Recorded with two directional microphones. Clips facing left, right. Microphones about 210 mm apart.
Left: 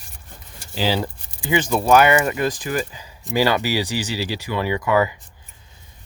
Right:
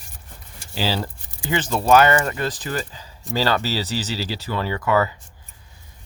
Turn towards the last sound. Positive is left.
turn(degrees=15)  # may be behind; listen again after turning